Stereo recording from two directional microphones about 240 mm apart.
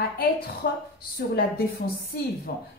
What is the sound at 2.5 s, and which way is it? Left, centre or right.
Speech, left.